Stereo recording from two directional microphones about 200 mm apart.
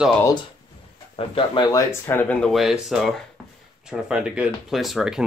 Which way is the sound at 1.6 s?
15° left (ahead or behind).